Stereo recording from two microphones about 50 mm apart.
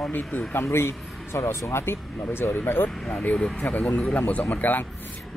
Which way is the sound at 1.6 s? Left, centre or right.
Left.